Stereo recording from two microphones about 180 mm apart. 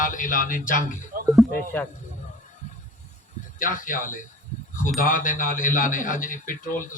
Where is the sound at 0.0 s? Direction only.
45° left (ahead or behind).